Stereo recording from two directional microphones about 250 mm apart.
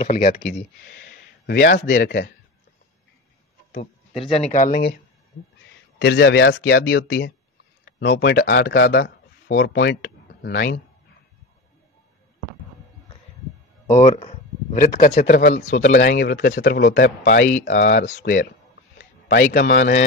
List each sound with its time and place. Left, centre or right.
0.0 s speech: left
3.7 s speech: left
5.3 s speech: left
13.8 s speech: left
18.9 s a sound: left